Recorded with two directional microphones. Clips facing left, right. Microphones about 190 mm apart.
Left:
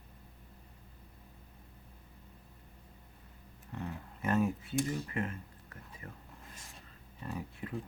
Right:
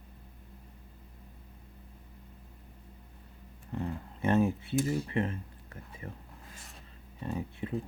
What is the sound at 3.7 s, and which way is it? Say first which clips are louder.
Speech: right 6 dB; 30° right (ahead or behind).